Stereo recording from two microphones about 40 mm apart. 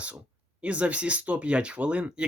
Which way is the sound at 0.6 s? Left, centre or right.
Right.